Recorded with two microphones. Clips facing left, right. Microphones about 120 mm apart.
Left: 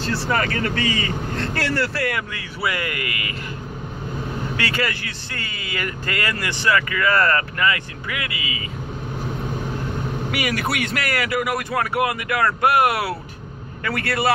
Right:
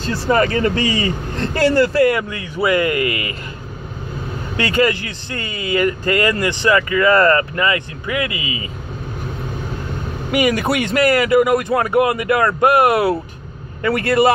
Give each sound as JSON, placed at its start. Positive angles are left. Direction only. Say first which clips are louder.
{"t": 0.3, "sound": "speech", "louder": "right 9 dB", "side_deg": -25}
{"t": 4.6, "sound": "speech", "louder": "right 10 dB", "side_deg": -20}
{"t": 10.3, "sound": "speech", "louder": "right 9 dB", "side_deg": -20}